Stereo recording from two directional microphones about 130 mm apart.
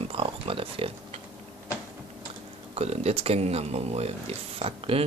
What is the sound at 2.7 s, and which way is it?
Speech, 55° right (ahead or behind).